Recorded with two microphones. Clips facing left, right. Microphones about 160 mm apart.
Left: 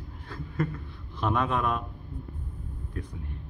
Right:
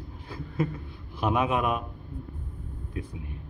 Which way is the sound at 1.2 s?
10° right (ahead or behind).